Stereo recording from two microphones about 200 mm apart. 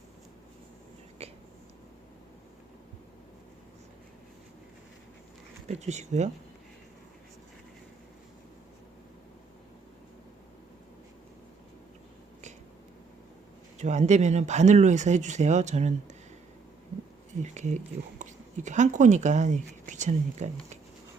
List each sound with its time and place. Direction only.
1.2 s whispering: 30° right (ahead or behind)
5.6 s speech: 35° right (ahead or behind)
13.7 s speech: 35° right (ahead or behind)
17.4 s speech: 35° right (ahead or behind)